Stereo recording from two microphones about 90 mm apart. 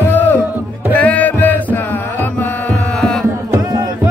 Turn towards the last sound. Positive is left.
turn(degrees=10)  # may be behind; listen again after turning